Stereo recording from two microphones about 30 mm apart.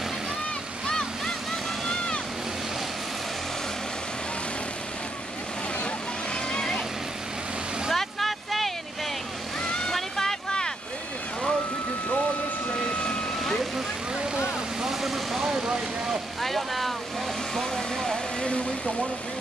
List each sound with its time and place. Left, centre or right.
0.8 s waves: left
6.5 s vehicle: left
7.9 s vehicle: centre
9.9 s vehicle: centre
12.9 s vehicle: left
14.8 s vehicle: centre
15.5 s vehicle: right
16.3 s vehicle: centre
17.6 s vehicle: centre